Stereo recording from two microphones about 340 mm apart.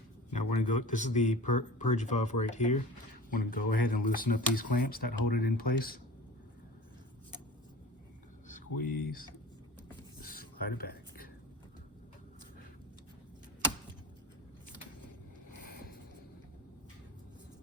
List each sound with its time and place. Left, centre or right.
0.3 s speech: left
8.8 s speech: left
10.8 s a sound: left